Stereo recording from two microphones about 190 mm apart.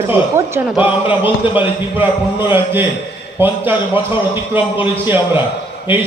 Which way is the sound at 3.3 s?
10° right (ahead or behind).